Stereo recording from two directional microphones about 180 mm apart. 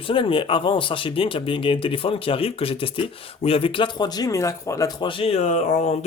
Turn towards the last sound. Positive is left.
turn(degrees=40)  # may be behind; listen again after turning